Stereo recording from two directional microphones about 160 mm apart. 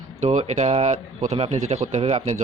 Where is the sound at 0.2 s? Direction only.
45° right (ahead or behind).